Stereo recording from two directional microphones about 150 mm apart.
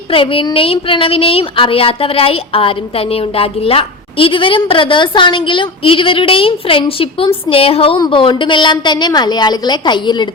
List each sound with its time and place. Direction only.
0.1 s a woman's voice: 35° left (ahead or behind)